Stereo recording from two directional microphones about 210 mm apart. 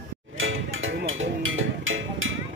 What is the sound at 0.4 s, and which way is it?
Music, 70° right (ahead or behind).